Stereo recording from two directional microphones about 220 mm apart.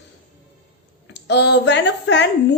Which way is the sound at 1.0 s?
50° left (ahead or behind).